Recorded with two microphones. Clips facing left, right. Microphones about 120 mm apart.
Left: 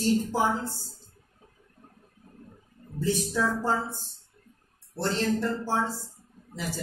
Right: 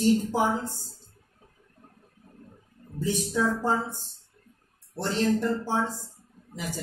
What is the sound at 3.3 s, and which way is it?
Speech, 15° right (ahead or behind).